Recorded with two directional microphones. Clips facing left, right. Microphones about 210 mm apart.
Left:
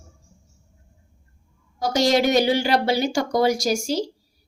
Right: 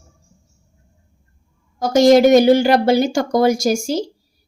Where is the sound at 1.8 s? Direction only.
50° right (ahead or behind).